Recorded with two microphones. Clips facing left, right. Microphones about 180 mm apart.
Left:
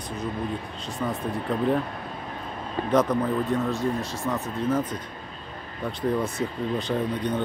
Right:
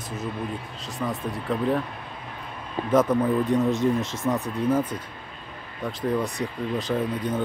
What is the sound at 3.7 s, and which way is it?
Speech, 20° right (ahead or behind).